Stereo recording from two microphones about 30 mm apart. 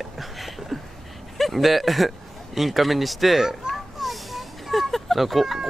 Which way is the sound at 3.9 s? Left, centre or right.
Centre.